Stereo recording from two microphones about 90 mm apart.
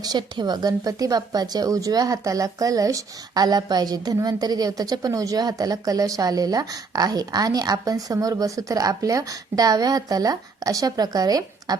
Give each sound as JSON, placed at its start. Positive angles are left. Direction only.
{"t": 0.0, "sound": "a woman's voice", "side_deg": -50}